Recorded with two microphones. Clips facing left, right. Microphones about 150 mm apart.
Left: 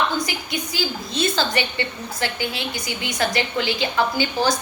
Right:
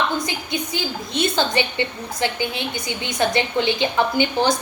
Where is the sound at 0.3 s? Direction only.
25° right (ahead or behind).